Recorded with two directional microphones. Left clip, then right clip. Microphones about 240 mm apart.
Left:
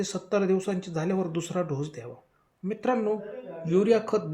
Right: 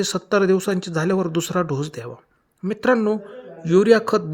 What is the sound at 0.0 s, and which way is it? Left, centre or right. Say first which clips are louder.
Speech: right 8 dB; right.